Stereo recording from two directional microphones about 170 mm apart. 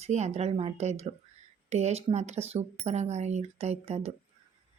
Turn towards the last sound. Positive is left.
turn(degrees=-40)  # may be behind; listen again after turning